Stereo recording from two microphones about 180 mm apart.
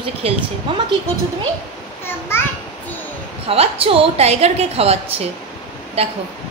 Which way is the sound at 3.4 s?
30° right (ahead or behind).